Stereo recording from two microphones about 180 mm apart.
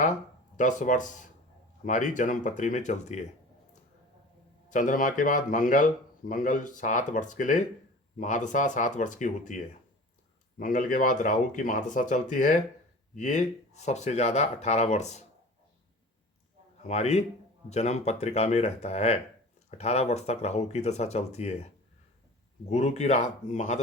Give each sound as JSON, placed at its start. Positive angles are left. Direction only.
{"t": 0.5, "sound": "a man's voice", "side_deg": 45}
{"t": 4.7, "sound": "a man's voice", "side_deg": 45}
{"t": 16.8, "sound": "speech", "side_deg": 40}
{"t": 22.7, "sound": "speech", "side_deg": 40}